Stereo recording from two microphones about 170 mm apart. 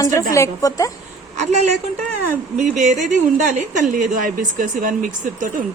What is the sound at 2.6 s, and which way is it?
Speech, 45° right (ahead or behind).